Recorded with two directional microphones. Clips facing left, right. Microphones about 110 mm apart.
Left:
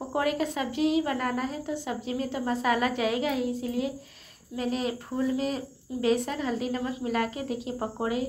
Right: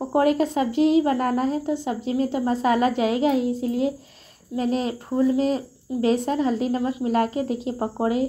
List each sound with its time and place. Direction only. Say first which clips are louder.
0.1 s speech: right 8 dB; 30° right (ahead or behind)